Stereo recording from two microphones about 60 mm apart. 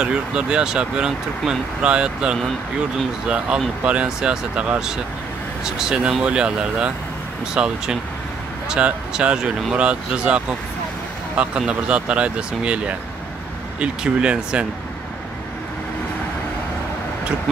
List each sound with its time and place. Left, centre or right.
0.0 s speech: centre